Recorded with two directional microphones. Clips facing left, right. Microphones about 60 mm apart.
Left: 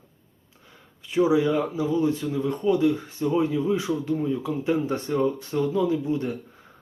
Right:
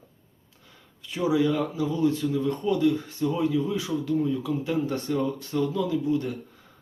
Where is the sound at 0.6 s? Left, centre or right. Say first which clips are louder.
Left 1 dB; left.